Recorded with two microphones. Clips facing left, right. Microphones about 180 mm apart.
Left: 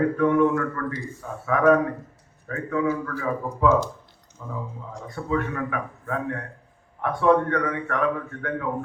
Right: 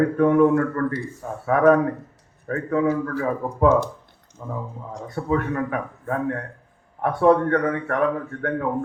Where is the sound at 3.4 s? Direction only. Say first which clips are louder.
Right 3 dB; 55° right (ahead or behind).